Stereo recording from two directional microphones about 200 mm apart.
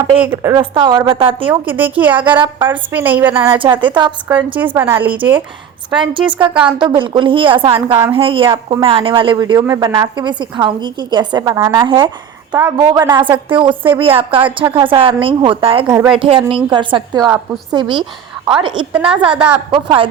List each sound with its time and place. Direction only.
0.2 s a woman's voice: 10° right (ahead or behind)
0.5 s speech: 25° right (ahead or behind)
1.6 s a woman's voice: 10° right (ahead or behind)
3.6 s speech: 25° right (ahead or behind)
4.5 s a woman's voice: 10° right (ahead or behind)
6.1 s speech: 25° right (ahead or behind)
6.5 s a woman's voice: 5° right (ahead or behind)
6.7 s speech: 25° right (ahead or behind)
16.0 s a woman's voice: 5° right (ahead or behind)
16.5 s speech: 25° right (ahead or behind)
18.9 s a woman's voice: 5° right (ahead or behind)
19.7 s speech: 25° right (ahead or behind)